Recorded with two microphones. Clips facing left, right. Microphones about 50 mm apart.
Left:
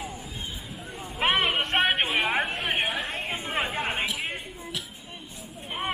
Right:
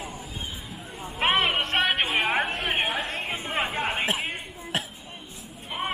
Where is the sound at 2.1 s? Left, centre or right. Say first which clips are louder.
Right 1 dB; right.